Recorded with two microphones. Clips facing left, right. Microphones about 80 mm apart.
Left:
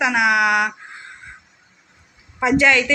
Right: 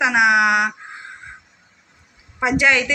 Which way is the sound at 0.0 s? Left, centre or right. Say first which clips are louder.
Right 2 dB; right.